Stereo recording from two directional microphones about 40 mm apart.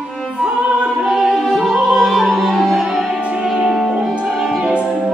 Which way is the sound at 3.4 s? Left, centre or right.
Centre.